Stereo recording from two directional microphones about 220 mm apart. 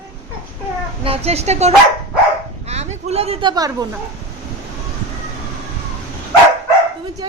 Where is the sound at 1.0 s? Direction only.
25° right (ahead or behind).